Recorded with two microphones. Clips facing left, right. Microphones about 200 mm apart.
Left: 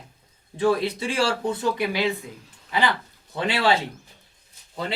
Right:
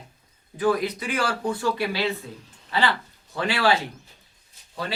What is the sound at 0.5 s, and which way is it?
Speech, 25° left (ahead or behind).